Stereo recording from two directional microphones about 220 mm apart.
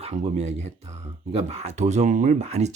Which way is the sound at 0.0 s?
30° right (ahead or behind).